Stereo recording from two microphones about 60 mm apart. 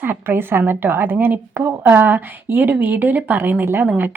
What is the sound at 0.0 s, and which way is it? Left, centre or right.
A woman's voice, right.